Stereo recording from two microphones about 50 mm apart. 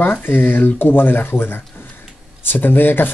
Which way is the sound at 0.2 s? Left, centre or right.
Left.